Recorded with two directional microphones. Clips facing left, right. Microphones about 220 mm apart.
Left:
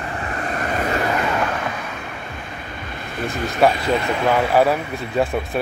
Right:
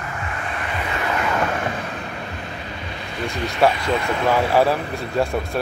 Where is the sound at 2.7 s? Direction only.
50° left (ahead or behind).